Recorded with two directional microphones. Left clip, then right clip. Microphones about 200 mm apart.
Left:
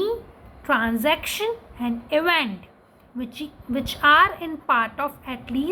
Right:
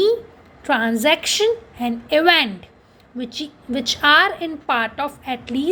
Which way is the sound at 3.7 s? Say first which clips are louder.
Right 2 dB; 30° right (ahead or behind).